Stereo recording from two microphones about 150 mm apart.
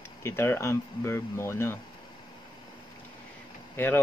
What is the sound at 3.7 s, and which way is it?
Speech, 15° left (ahead or behind).